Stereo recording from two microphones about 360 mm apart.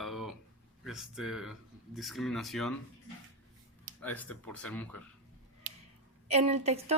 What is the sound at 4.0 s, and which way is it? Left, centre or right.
Speech, centre.